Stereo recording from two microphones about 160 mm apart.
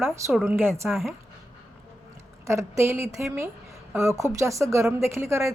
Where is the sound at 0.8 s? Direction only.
Centre (ahead or behind).